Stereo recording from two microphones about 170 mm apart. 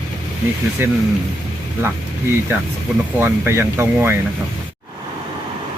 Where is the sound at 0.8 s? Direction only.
15° right (ahead or behind).